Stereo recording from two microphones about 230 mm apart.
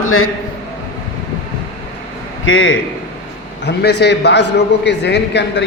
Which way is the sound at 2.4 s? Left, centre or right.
Left.